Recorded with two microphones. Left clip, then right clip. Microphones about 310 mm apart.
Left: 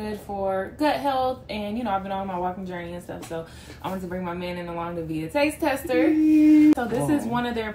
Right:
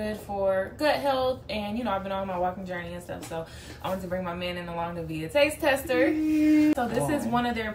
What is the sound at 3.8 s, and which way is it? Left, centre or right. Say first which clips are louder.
Speech: even; centre.